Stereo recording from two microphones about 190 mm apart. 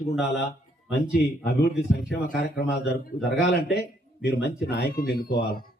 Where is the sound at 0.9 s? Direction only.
60° left (ahead or behind).